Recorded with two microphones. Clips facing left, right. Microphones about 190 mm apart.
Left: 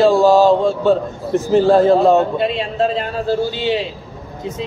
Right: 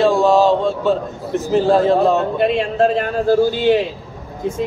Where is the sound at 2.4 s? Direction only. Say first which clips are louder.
Right 3 dB; 50° right (ahead or behind).